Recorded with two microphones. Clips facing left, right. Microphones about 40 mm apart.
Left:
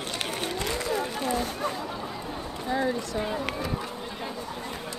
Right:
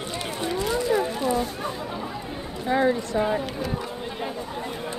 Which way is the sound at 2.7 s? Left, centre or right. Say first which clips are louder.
Right 6 dB; right.